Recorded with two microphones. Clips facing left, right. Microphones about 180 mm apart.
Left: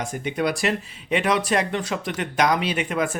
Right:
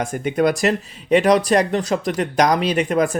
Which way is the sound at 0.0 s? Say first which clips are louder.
Right 6 dB; 50° right (ahead or behind).